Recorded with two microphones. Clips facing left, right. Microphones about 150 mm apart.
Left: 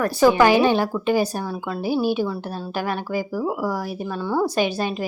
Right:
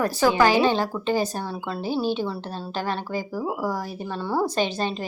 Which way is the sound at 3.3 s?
15° right (ahead or behind).